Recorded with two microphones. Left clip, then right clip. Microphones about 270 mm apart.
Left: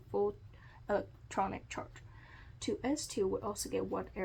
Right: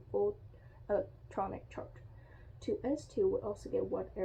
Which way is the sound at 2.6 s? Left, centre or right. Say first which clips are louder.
Even; left.